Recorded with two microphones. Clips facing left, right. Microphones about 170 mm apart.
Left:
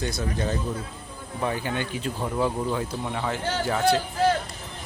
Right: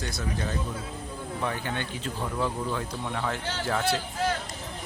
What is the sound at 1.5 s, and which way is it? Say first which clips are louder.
Speech: left 5 dB; 10° left (ahead or behind).